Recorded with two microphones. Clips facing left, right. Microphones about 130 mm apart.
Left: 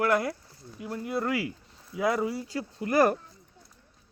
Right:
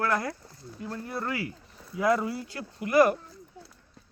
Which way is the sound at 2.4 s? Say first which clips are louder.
Left 3 dB; 35° left (ahead or behind).